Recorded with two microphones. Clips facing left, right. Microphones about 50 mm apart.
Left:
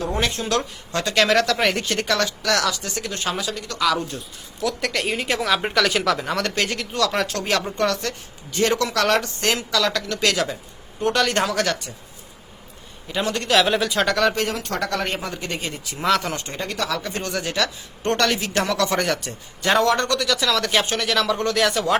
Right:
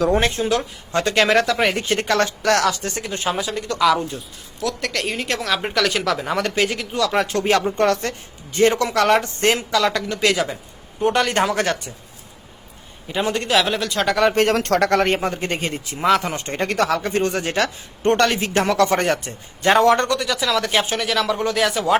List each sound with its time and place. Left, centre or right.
0.2 s speech: right
3.1 s speech: centre
4.6 s speech: centre
7.3 s speech: right
9.4 s speech: right
9.8 s speech: centre
13.1 s speech: centre
13.5 s speech: centre
14.3 s speech: right
16.0 s speech: centre
16.4 s speech: right; by 21.9 s centre